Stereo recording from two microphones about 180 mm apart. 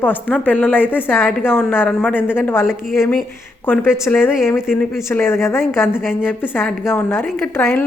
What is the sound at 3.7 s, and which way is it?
A woman's voice, 10° left (ahead or behind).